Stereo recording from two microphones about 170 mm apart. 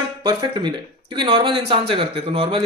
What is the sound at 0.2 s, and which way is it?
Speech, 25° right (ahead or behind).